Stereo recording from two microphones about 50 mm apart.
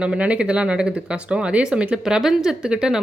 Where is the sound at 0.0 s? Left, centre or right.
Right.